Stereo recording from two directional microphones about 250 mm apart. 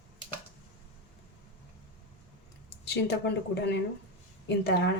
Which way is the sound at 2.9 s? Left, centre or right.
Left.